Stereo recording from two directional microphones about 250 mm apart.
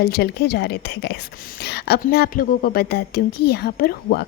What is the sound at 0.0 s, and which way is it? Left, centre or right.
A woman's voice, left.